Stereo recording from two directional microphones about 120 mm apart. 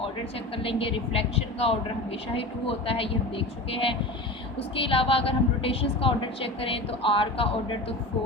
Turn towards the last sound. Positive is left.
turn(degrees=50)  # may be behind; listen again after turning